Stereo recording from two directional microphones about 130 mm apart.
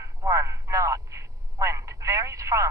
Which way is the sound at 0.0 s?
25° right (ahead or behind).